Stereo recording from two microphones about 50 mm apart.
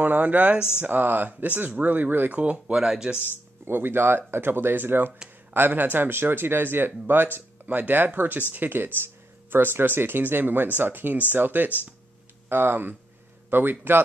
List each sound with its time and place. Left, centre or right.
0.0 s speech: right
0.6 s speech: centre
0.8 s speech: right
2.3 s speech: right
2.7 s speech: centre
3.6 s speech: right